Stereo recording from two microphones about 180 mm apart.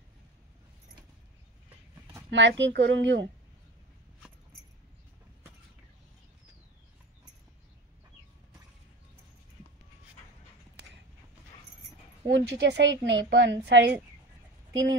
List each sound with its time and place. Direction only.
2.3 s a woman's voice: 85° right
12.3 s a woman's voice: 80° right
14.7 s speech: 90° right